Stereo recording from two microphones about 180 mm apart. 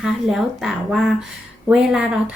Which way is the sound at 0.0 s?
Centre (ahead or behind).